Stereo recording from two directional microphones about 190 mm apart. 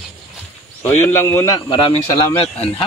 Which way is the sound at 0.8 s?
15° left (ahead or behind).